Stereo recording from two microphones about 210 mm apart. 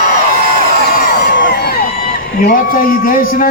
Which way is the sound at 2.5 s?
40° left (ahead or behind).